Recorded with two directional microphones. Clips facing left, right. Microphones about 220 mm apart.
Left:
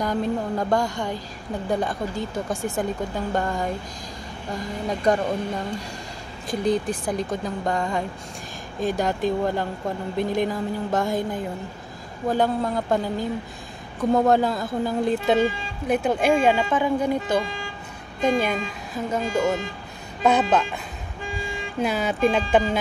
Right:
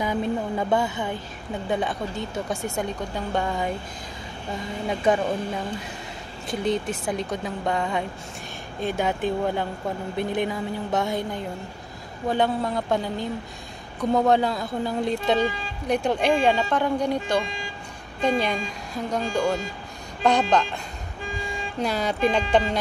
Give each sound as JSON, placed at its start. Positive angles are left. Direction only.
{"t": 0.0, "sound": "speech", "side_deg": -5}
{"t": 6.4, "sound": "speech", "side_deg": 0}